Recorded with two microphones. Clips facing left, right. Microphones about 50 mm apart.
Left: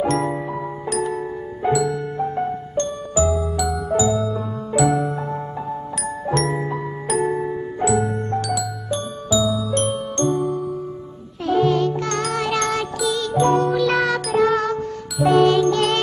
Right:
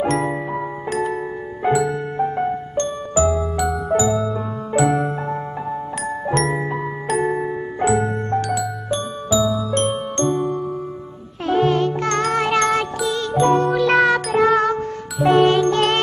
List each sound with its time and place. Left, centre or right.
0.0 s music: centre
11.4 s jingle: right
13.7 s music: right